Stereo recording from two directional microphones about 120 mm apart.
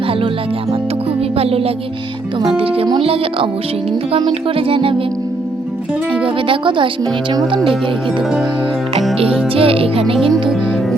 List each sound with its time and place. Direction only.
1.4 s music: 55° right (ahead or behind)
2.5 s speech: 50° right (ahead or behind)
6.2 s speech: 45° right (ahead or behind)
9.1 s speech: 55° right (ahead or behind)